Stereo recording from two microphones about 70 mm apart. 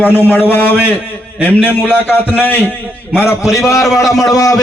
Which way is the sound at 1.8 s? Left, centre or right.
Left.